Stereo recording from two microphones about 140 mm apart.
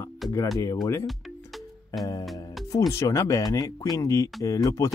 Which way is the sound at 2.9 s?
20° left (ahead or behind).